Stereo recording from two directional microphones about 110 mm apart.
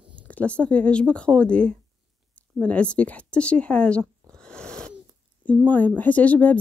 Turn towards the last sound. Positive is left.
turn(degrees=15)  # may be behind; listen again after turning